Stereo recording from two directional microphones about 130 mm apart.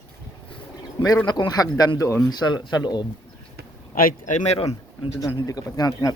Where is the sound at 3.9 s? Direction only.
85° left.